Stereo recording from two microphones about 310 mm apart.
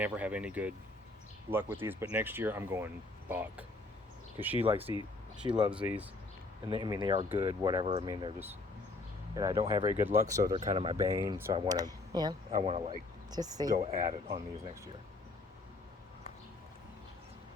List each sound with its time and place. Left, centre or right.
0.0 s speech: centre
4.5 s speech: centre
5.7 s speech: centre